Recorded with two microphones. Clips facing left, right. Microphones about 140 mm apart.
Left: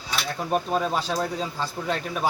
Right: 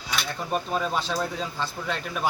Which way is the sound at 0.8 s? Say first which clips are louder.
Left 2 dB; 40° left (ahead or behind).